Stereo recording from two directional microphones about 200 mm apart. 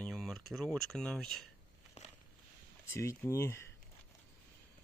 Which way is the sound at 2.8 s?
15° left (ahead or behind).